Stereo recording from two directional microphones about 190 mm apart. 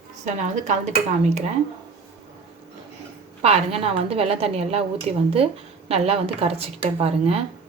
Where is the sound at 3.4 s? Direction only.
30° right (ahead or behind).